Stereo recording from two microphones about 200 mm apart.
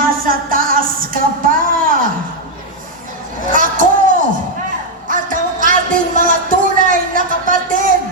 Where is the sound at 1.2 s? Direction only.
45° right (ahead or behind).